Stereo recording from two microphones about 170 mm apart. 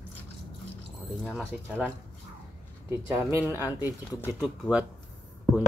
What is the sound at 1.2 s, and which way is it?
Speech, centre (ahead or behind).